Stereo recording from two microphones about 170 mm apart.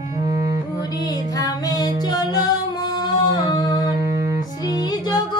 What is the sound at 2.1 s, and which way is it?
Music, 25° left (ahead or behind).